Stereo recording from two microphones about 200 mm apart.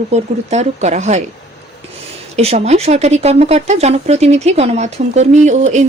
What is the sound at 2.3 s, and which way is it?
Speech, 30° right (ahead or behind).